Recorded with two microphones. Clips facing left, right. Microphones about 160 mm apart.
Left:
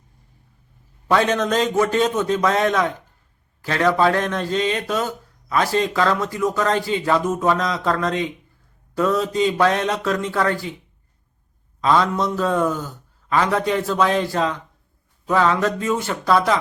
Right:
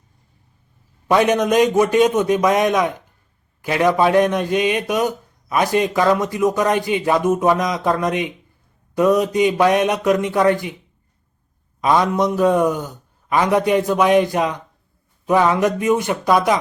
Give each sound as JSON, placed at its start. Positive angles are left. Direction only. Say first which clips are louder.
{"t": 1.0, "sound": "a man's voice", "louder": "right 3 dB", "side_deg": -15}
{"t": 11.8, "sound": "a man's voice", "louder": "right 2 dB", "side_deg": -15}